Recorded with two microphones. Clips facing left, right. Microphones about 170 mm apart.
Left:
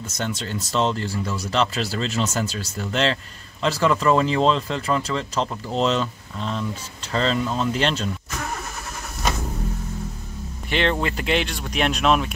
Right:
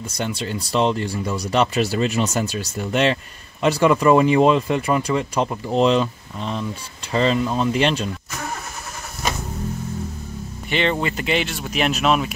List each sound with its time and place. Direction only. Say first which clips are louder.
0.2 s speech: right 2 dB; 15° right (ahead or behind)
10.7 s speech: right 1 dB; centre (ahead or behind)